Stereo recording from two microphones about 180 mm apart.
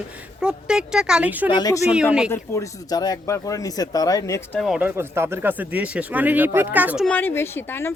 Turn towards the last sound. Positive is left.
turn(degrees=10)  # may be behind; listen again after turning